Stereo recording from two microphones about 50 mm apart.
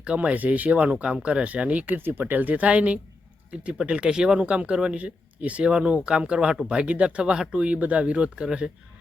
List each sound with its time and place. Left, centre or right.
0.0 s speech: right
2.2 s speech: right; by 8.7 s centre